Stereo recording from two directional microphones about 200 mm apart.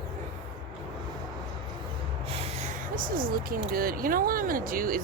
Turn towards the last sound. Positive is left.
turn(degrees=-45)  # may be behind; listen again after turning